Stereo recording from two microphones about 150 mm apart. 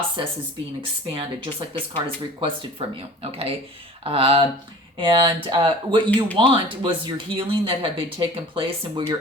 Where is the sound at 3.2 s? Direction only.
40° right (ahead or behind).